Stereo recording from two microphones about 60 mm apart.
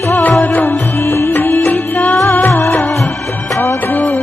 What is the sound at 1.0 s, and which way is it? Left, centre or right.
Music, left.